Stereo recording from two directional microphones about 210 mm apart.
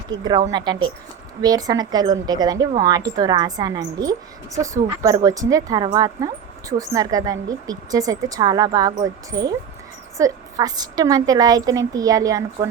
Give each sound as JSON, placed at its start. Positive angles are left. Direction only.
{"t": 0.5, "sound": "a woman's voice", "side_deg": -20}